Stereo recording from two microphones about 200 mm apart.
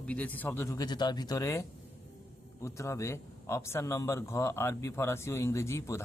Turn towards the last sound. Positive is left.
turn(degrees=15)  # may be behind; listen again after turning